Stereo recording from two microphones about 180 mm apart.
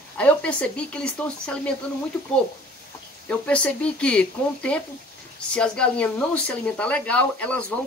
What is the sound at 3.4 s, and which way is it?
Speech, 5° left (ahead or behind).